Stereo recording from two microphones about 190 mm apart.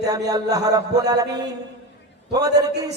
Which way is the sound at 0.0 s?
20° right (ahead or behind).